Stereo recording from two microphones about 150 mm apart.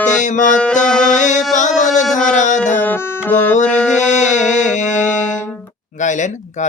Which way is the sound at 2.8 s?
15° left (ahead or behind).